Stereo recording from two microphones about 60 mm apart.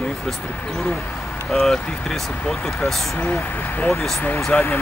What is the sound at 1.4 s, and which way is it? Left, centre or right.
Speech, centre.